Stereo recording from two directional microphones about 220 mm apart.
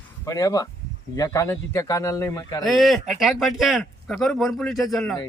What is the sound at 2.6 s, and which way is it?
Speech, centre (ahead or behind).